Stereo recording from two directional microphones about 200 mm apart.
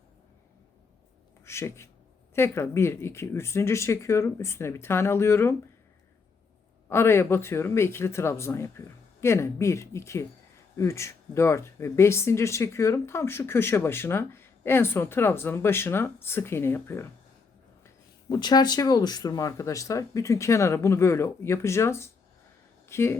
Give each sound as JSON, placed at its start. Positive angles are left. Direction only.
{"t": 1.5, "sound": "speech", "side_deg": 15}
{"t": 6.8, "sound": "speech", "side_deg": 10}